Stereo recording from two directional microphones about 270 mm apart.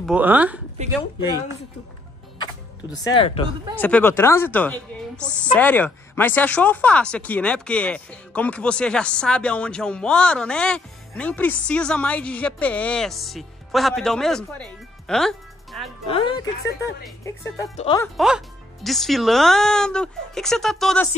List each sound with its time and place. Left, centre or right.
0.0 s speech: centre
2.3 s music: centre
3.2 s speech: left
3.7 s speech: centre
16.1 s speech: centre
17.7 s speech: centre
18.0 s speech: centre